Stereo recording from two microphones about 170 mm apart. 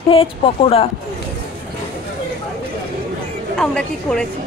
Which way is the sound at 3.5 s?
5° left (ahead or behind).